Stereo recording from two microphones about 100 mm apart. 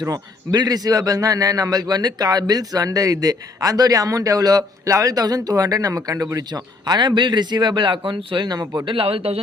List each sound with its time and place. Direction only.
0.0 s a man's voice: 40° right (ahead or behind)
8.8 s speech: 60° right (ahead or behind)